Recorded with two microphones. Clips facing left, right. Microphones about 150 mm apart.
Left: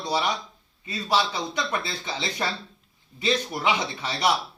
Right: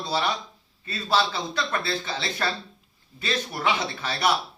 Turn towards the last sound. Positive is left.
turn(degrees=20)  # may be behind; listen again after turning